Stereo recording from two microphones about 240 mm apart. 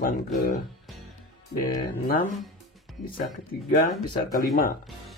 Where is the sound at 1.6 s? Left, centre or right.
Left.